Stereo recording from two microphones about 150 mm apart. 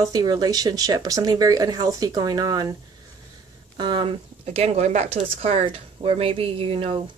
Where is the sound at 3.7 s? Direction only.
30° right (ahead or behind).